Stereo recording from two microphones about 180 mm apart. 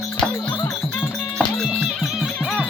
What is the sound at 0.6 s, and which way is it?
Music, 5° left (ahead or behind).